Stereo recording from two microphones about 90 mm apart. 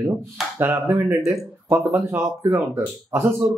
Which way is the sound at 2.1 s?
35° right (ahead or behind).